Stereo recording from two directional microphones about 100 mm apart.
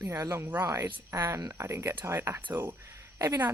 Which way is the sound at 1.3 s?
35° right (ahead or behind).